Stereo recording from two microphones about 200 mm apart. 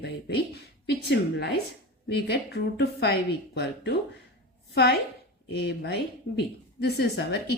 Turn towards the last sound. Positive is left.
turn(degrees=55)  # may be behind; listen again after turning